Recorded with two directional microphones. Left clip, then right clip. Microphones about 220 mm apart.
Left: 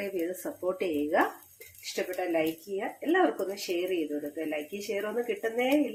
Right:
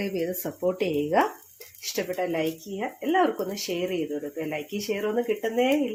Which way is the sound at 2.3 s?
40° right (ahead or behind).